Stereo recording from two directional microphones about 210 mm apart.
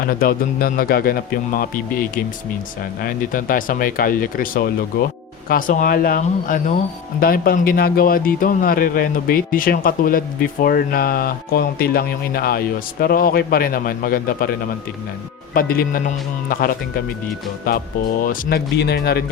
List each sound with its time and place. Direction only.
0.0 s speech: 45° left (ahead or behind)
15.5 s speech: 45° left (ahead or behind)